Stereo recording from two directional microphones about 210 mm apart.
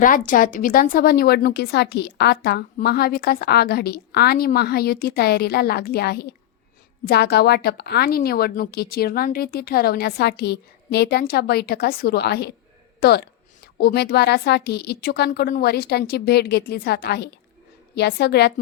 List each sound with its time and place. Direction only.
0.0 s speech: 40° left (ahead or behind)